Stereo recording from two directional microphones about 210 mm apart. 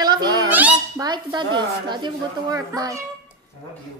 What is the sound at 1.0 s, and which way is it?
Speech, 20° right (ahead or behind).